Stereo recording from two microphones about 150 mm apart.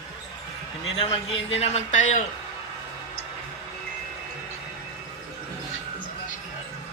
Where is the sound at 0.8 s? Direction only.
40° left (ahead or behind); by 2.2 s 55° left (ahead or behind).